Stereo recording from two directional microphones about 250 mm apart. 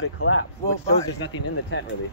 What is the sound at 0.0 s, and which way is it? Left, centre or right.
Speech, left.